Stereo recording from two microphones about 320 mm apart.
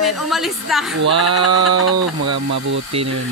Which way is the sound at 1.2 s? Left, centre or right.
Right.